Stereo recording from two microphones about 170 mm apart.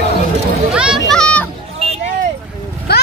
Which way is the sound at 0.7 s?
5° right (ahead or behind).